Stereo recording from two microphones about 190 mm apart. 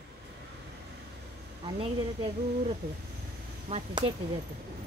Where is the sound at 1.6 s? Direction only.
30° right (ahead or behind).